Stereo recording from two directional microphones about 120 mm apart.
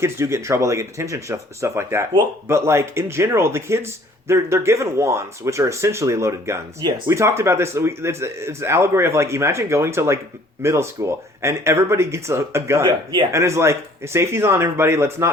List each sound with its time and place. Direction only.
0.0 s speech: 20° right (ahead or behind)